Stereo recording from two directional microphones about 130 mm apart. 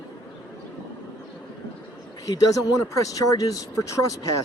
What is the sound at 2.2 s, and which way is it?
Speech, 25° left (ahead or behind).